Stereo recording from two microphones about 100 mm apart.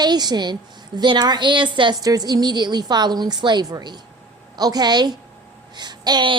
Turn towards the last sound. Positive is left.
turn(degrees=-50)  # may be behind; listen again after turning